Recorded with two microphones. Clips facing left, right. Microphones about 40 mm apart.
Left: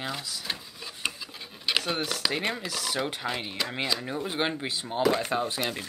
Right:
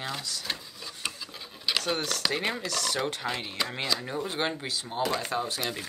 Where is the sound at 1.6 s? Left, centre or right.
Centre.